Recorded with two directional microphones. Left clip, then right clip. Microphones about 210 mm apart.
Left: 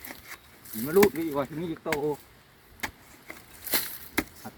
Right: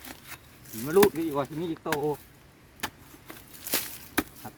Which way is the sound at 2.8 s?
10° right (ahead or behind).